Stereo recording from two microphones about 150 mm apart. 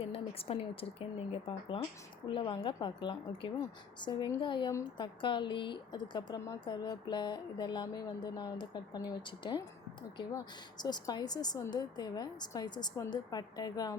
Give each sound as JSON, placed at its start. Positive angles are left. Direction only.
{"t": 0.1, "sound": "speech", "side_deg": 40}